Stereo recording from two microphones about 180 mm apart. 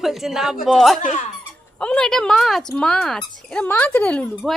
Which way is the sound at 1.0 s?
45° left (ahead or behind).